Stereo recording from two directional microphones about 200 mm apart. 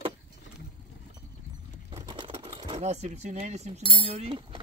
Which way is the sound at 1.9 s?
25° right (ahead or behind).